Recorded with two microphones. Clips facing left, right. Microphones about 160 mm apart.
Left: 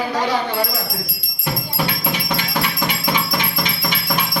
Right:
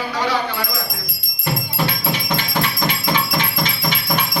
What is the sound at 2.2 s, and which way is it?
Music, 5° left (ahead or behind).